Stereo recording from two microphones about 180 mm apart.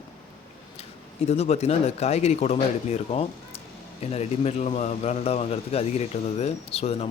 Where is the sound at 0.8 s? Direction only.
35° left (ahead or behind).